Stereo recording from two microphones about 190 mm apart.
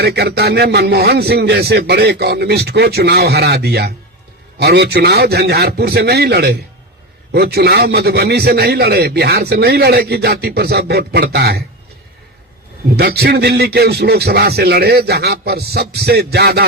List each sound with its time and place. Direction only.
0.0 s a man's voice: 60° right (ahead or behind)
13.0 s a man's voice: 55° right (ahead or behind)